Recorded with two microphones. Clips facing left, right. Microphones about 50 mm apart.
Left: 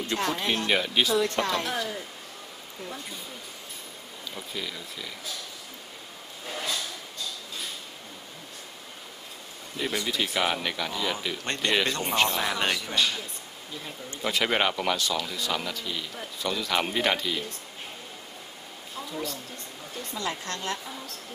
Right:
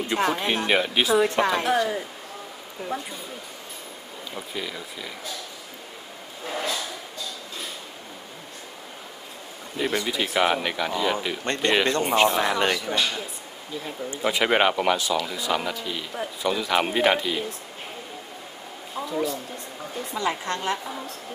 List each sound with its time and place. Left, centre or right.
0.0 s speech: right
4.4 s speech: centre
6.4 s a sound: centre
9.8 s speech: centre
19.2 s speech: centre
20.2 s speech: right